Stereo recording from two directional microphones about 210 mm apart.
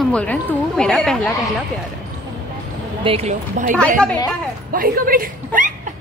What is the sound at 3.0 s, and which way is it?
Speech, 30° right (ahead or behind).